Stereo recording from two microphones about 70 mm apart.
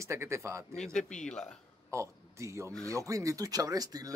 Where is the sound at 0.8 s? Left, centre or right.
Centre.